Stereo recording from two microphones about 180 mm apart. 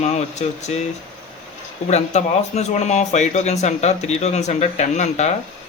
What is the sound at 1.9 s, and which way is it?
Speech, 40° left (ahead or behind).